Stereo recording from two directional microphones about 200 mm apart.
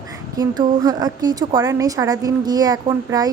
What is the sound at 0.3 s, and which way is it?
A woman's voice, 20° right (ahead or behind).